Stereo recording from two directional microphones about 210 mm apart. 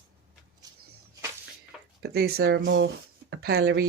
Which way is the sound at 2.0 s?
50° right (ahead or behind).